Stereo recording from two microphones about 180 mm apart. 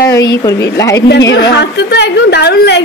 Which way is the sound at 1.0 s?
75° left (ahead or behind).